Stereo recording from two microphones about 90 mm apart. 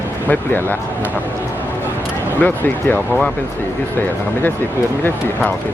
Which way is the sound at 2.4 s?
20° left (ahead or behind).